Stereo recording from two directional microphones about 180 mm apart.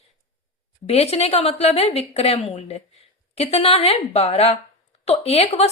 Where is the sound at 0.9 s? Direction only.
35° left (ahead or behind).